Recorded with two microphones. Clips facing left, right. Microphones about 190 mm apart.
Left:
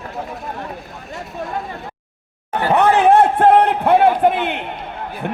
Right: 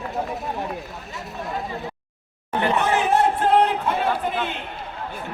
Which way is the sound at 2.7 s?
60° left (ahead or behind).